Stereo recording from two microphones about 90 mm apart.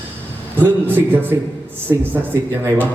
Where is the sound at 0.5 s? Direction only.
20° right (ahead or behind).